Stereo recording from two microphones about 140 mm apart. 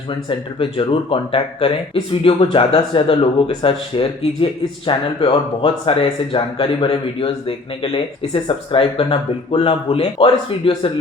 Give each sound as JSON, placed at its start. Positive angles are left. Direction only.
{"t": 0.3, "sound": "speech", "side_deg": 40}